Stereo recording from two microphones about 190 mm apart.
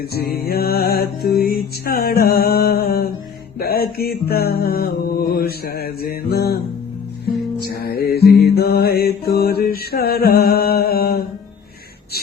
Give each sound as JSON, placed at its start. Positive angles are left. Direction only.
{"t": 0.0, "sound": "music", "side_deg": 55}
{"t": 3.6, "sound": "mantra", "side_deg": 55}
{"t": 7.6, "sound": "music", "side_deg": 55}